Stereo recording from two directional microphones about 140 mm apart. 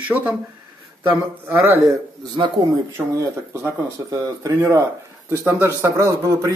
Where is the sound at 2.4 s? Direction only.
35° right (ahead or behind).